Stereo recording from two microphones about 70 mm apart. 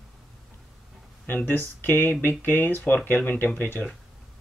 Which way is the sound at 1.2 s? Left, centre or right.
Left.